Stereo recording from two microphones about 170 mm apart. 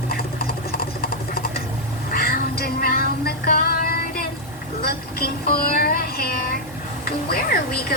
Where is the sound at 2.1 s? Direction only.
65° left (ahead or behind).